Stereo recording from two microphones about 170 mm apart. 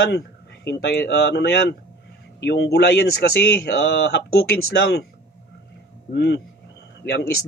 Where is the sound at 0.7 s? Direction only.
75° left (ahead or behind).